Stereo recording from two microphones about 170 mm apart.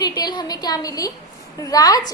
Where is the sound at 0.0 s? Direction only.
25° left (ahead or behind).